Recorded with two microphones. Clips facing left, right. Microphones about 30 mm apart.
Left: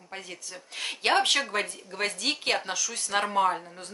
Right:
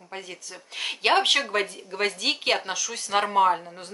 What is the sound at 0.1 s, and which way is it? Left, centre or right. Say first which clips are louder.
A woman's voice: right 2 dB; centre.